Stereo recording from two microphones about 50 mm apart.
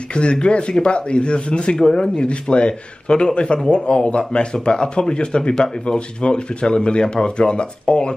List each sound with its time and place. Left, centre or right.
0.1 s speech: left